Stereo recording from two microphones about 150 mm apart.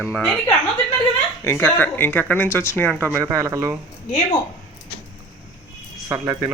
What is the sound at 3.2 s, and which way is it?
Speech, 20° right (ahead or behind).